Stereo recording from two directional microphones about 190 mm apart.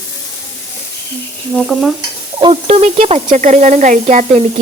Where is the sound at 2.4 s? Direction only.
30° right (ahead or behind).